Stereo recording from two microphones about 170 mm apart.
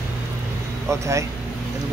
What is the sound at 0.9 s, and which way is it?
Speech, 15° right (ahead or behind).